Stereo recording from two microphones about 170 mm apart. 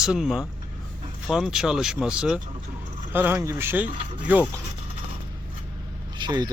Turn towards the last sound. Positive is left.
turn(degrees=-25)  # may be behind; listen again after turning